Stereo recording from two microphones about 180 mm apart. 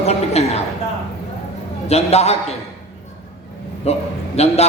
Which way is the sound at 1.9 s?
35° left (ahead or behind).